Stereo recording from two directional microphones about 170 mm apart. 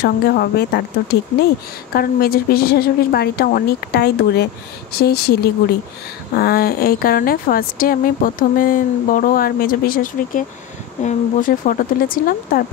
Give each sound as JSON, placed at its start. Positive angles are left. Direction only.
{"t": 0.0, "sound": "a woman's voice", "side_deg": 65}
{"t": 2.0, "sound": "a woman's voice", "side_deg": 60}